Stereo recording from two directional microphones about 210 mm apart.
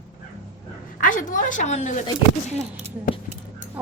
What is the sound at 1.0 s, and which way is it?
A woman's voice, 40° left (ahead or behind).